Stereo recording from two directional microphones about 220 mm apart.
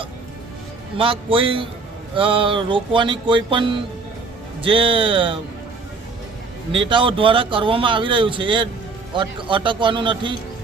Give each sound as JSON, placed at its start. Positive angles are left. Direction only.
{"t": 0.9, "sound": "a man's voice", "side_deg": -25}
{"t": 6.7, "sound": "a man's voice", "side_deg": -20}